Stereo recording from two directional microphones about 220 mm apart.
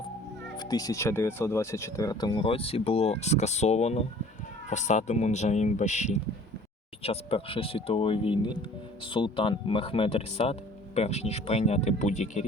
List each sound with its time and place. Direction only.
0.5 s speech: 20° left (ahead or behind)